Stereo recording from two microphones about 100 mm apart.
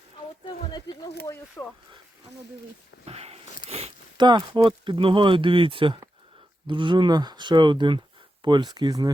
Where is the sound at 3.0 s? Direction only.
90° right.